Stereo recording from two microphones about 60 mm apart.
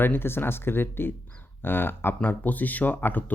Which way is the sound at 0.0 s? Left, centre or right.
Left.